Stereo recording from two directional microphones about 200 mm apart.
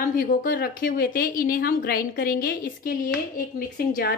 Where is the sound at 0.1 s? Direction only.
45° left (ahead or behind).